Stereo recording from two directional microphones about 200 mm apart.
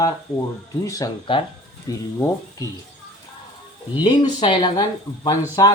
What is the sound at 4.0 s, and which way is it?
Speech, 20° left (ahead or behind).